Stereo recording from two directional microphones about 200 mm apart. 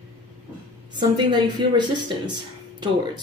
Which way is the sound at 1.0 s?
20° right (ahead or behind).